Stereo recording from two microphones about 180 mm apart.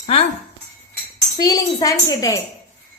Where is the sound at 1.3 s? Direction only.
20° left (ahead or behind).